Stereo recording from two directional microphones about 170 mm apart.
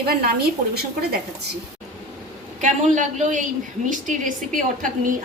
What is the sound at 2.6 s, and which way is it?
A woman's voice, 45° right (ahead or behind).